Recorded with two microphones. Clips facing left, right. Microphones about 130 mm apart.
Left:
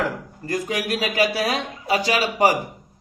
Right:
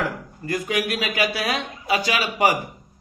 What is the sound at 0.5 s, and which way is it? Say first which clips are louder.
A man's voice: even; 35° left (ahead or behind).